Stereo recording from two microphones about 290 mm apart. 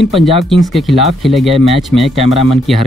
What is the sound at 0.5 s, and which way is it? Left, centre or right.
Speech, centre.